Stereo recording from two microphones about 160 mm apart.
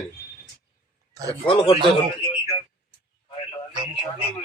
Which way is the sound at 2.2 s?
30° left (ahead or behind).